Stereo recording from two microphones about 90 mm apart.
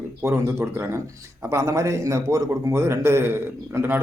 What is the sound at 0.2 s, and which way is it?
A man's voice, 25° right (ahead or behind).